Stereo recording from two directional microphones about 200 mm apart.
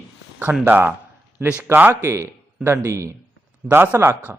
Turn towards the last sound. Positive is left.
turn(degrees=-10)  # may be behind; listen again after turning